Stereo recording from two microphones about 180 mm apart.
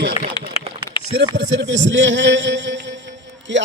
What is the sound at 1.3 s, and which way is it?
A man's voice, 75° right (ahead or behind).